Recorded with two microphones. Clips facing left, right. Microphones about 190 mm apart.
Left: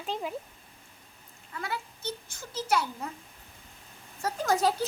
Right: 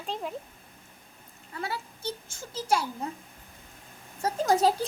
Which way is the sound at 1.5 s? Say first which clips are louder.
Right 1 dB; 30° right (ahead or behind).